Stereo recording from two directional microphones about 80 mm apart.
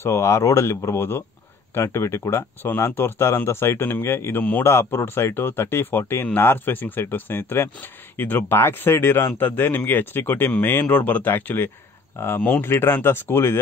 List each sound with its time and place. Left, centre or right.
0.0 s speech: left